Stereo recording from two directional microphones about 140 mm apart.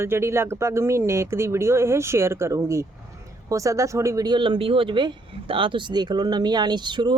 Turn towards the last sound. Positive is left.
turn(degrees=-35)  # may be behind; listen again after turning